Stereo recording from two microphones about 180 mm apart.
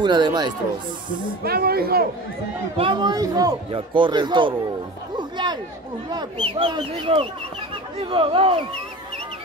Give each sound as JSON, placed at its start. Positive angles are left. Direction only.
{"t": 0.0, "sound": "a man's voice", "side_deg": -25}
{"t": 1.4, "sound": "speech", "side_deg": -60}
{"t": 2.8, "sound": "a man's voice", "side_deg": -25}